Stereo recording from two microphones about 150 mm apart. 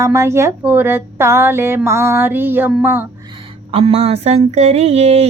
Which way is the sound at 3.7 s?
40° right (ahead or behind).